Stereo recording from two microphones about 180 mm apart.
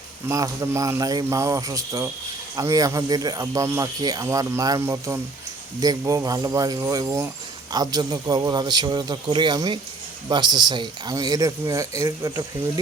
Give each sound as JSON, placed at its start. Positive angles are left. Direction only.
{"t": 0.3, "sound": "a man's voice", "side_deg": -20}